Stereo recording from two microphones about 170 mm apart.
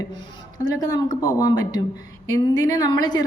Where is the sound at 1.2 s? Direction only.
20° left (ahead or behind).